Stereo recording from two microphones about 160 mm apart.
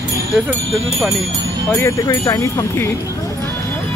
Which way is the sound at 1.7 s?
20° left (ahead or behind).